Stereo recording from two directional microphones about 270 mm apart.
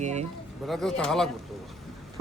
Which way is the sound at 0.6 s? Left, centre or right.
Centre.